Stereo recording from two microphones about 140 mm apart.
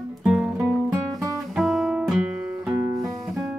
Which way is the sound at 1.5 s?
Centre (ahead or behind).